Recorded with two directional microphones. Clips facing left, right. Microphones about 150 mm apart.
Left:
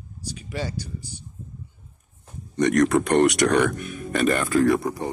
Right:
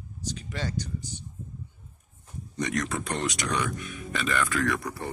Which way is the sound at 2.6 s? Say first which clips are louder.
Left 11 dB; 65° left (ahead or behind).